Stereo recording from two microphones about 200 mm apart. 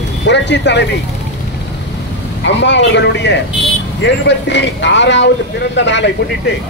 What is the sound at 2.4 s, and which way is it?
Speech, 65° left (ahead or behind).